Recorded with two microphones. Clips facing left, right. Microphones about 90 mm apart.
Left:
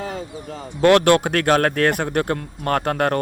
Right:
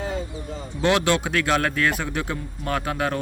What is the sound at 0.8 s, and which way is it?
Speech, 55° left (ahead or behind).